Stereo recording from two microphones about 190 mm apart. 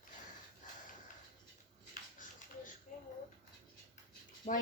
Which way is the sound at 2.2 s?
45° left (ahead or behind).